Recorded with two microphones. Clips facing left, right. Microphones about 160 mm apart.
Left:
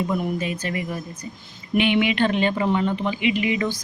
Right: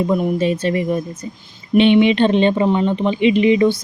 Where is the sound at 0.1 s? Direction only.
25° right (ahead or behind).